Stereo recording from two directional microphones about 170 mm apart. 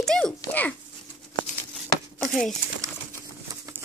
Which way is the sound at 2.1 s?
Centre (ahead or behind).